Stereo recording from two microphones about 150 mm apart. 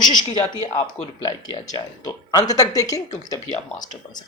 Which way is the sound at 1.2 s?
25° left (ahead or behind).